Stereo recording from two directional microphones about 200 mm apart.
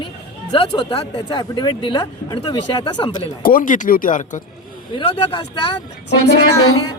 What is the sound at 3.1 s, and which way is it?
Speech, 45° left (ahead or behind).